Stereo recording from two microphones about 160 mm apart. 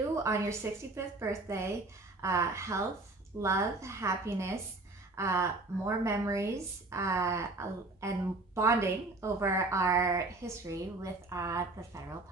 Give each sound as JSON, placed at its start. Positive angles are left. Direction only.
{"t": 0.1, "sound": "a woman's voice", "side_deg": -20}